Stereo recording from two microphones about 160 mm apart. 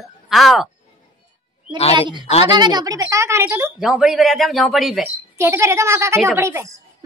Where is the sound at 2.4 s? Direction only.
25° right (ahead or behind).